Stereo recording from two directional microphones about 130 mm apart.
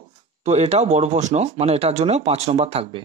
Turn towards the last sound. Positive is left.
turn(degrees=-50)  # may be behind; listen again after turning